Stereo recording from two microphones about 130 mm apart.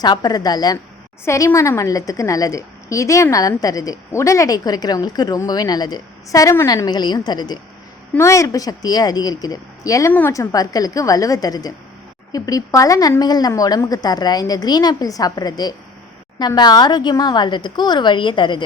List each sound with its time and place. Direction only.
0.0 s a woman's voice: 30° left (ahead or behind)
1.2 s a woman's voice: 20° left (ahead or behind)
10.1 s a woman's voice: 15° left (ahead or behind)
10.3 s a woman's voice: 25° left (ahead or behind)